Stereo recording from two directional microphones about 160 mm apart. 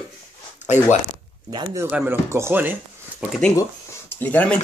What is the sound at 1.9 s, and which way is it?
Speech, 10° right (ahead or behind).